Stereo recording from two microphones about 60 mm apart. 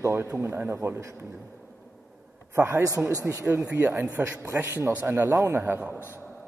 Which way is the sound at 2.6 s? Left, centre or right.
Right.